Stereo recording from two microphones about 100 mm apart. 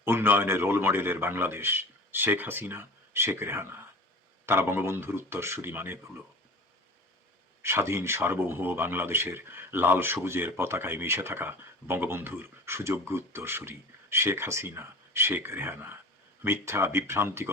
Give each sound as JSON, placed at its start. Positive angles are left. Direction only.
{"t": 0.0, "sound": "speech", "side_deg": -20}
{"t": 7.6, "sound": "speech", "side_deg": -25}